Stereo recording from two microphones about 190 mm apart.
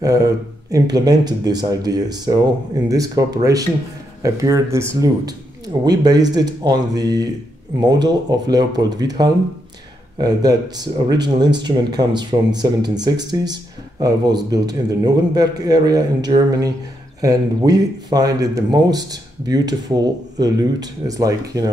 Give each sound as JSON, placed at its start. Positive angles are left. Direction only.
{"t": 0.0, "sound": "speech", "side_deg": -15}